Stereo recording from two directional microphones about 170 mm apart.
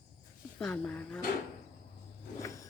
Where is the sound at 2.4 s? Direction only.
20° left (ahead or behind).